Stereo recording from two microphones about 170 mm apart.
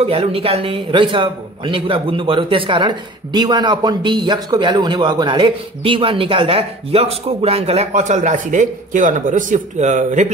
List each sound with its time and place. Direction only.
0.0 s a man's voice: 35° right (ahead or behind)